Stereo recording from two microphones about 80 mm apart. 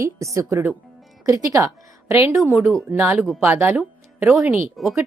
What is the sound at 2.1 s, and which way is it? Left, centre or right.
A woman's voice, right.